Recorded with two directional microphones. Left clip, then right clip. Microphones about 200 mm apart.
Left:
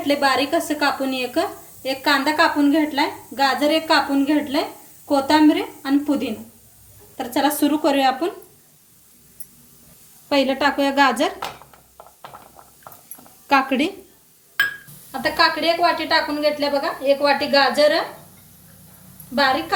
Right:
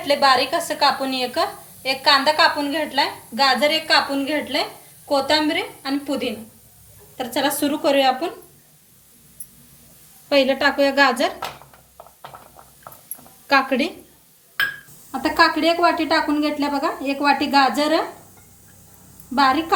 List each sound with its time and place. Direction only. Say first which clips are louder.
0.1 s a woman's voice: right 2 dB; 40° left (ahead or behind)
10.2 s a woman's voice: right 1 dB; 40° left (ahead or behind)
13.5 s a woman's voice: even; 40° left (ahead or behind)
15.1 s a woman's voice: right 1 dB; 50° right (ahead or behind)
19.4 s a woman's voice: right 1 dB; 50° right (ahead or behind)